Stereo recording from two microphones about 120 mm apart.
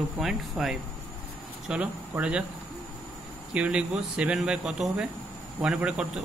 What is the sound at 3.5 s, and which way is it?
Speech, 10° right (ahead or behind).